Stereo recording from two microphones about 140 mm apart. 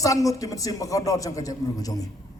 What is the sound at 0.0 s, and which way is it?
A man's voice, 25° left (ahead or behind).